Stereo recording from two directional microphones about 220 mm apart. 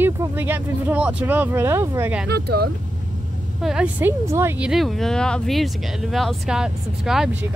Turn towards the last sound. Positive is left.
turn(degrees=0)  # may be behind; listen again after turning